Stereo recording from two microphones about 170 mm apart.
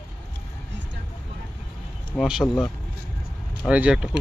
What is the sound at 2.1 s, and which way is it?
Speech, 5° right (ahead or behind).